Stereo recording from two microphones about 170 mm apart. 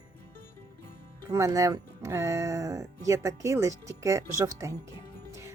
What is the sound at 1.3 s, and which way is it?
Speech, 20° right (ahead or behind).